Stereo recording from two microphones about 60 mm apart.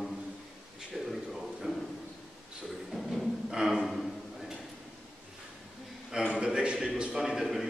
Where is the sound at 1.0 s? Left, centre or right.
Centre.